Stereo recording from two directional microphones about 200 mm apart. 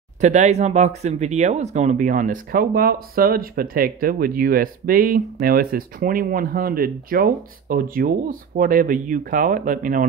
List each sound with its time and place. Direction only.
0.2 s speech: 35° right (ahead or behind)